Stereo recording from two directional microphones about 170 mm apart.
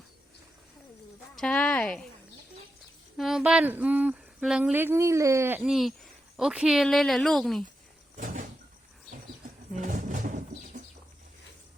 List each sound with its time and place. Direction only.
1.4 s speech: 5° left (ahead or behind)
3.2 s speech: centre (ahead or behind)
8.2 s sliding door: 55° right (ahead or behind)
9.7 s bird: 45° right (ahead or behind)